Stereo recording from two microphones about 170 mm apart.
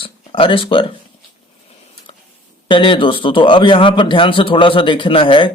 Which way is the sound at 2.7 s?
30° left (ahead or behind).